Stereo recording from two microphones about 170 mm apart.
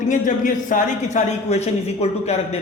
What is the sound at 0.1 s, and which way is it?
A man's voice, 50° left (ahead or behind).